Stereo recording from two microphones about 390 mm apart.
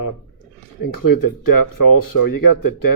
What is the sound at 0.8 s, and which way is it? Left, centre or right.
Speech, left.